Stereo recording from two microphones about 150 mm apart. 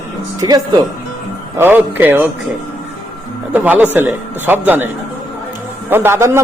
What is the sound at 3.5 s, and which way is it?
A man's voice, 10° right (ahead or behind).